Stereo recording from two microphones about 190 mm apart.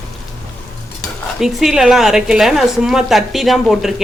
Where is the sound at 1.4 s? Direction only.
Centre (ahead or behind).